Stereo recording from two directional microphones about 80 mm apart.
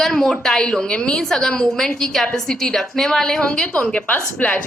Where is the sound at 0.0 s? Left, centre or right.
Centre.